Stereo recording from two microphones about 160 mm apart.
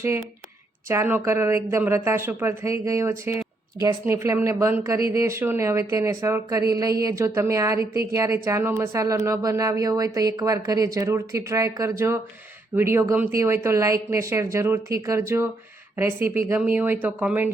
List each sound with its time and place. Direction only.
0.9 s a woman's voice: 15° right (ahead or behind)